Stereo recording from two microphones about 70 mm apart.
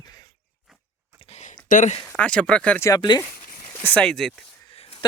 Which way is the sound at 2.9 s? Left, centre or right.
Left.